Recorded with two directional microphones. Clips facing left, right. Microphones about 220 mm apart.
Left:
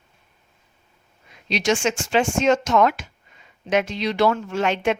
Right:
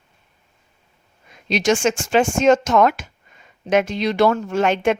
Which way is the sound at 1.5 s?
50° right (ahead or behind).